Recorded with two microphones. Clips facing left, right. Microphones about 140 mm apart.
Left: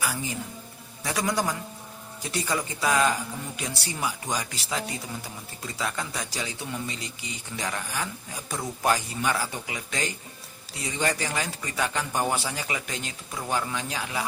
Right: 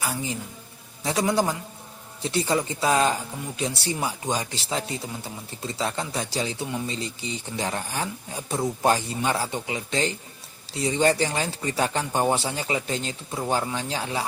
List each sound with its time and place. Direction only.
1.0 s speech: 25° right (ahead or behind)